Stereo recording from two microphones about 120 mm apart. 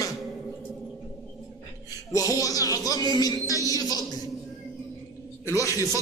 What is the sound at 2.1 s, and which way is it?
A man's voice, 30° left (ahead or behind).